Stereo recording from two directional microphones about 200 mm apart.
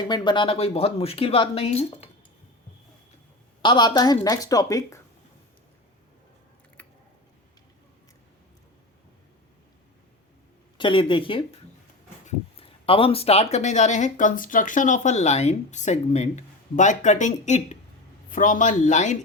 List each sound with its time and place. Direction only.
0.0 s speech: 20° left (ahead or behind)
3.6 s speech: 20° left (ahead or behind)
6.8 s a sound: 10° left (ahead or behind)
10.8 s speech: 25° left (ahead or behind)